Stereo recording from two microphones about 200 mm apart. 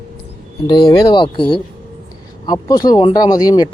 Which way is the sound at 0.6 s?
20° left (ahead or behind).